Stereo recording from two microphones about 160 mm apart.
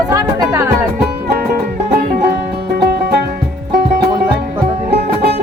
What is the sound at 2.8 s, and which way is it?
Music, 80° right.